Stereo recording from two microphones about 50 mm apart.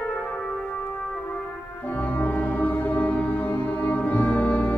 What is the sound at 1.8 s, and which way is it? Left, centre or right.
Music, left.